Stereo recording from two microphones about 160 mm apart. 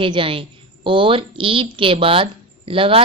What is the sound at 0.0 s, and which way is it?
A woman's voice, 30° right (ahead or behind).